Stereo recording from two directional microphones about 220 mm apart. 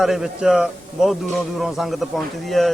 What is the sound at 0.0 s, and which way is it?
A man's voice, centre (ahead or behind).